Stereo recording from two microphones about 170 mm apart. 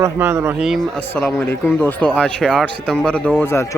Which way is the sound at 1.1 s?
10° left (ahead or behind).